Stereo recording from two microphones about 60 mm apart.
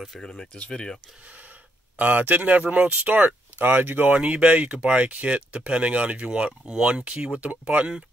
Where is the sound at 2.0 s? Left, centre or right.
Right.